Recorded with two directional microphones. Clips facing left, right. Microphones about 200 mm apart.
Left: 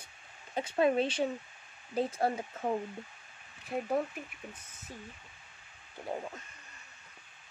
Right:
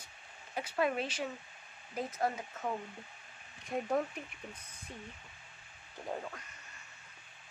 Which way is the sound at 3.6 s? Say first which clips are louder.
Left 1 dB; 5° left (ahead or behind).